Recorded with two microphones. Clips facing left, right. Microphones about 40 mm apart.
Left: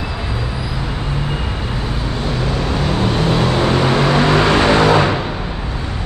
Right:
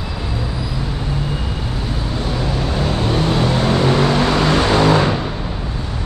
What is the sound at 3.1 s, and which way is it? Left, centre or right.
Vehicle, centre.